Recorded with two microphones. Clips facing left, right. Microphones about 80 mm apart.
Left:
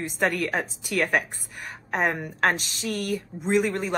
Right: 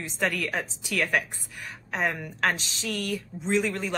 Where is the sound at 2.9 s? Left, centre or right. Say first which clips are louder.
Left 3 dB; centre.